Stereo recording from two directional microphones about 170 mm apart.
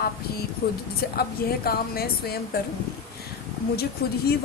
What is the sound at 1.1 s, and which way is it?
A woman's voice, 65° left (ahead or behind).